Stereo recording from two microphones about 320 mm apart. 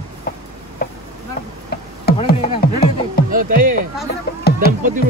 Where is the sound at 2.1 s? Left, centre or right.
Left.